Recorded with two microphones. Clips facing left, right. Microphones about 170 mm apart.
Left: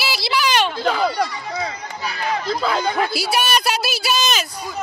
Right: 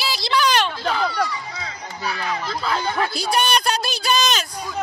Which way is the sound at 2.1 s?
35° left (ahead or behind).